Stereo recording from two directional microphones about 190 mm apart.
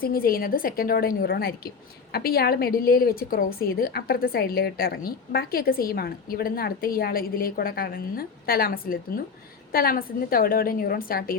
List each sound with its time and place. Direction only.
0.0 s a woman's voice: 50° left (ahead or behind)